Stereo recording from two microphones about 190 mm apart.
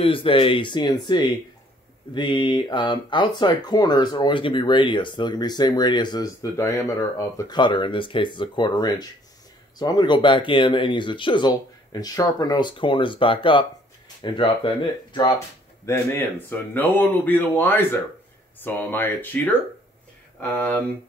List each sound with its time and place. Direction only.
0.0 s speech: 30° left (ahead or behind); by 20.8 s 10° left (ahead or behind)